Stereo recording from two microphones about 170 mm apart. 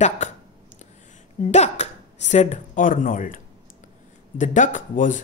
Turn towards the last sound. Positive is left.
turn(degrees=50)  # may be behind; listen again after turning